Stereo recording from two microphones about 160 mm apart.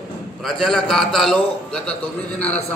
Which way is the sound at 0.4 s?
Centre (ahead or behind).